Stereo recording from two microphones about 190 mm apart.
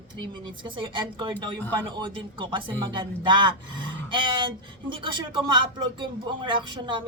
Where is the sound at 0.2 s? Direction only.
25° right (ahead or behind).